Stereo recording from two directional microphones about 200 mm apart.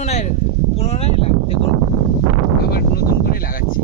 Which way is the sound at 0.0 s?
30° left (ahead or behind).